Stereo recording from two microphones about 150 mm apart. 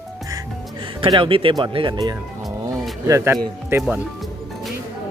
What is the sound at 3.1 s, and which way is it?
Speech, 20° right (ahead or behind).